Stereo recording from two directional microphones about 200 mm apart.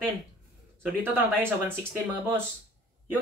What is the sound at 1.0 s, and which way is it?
Speech, 10° right (ahead or behind).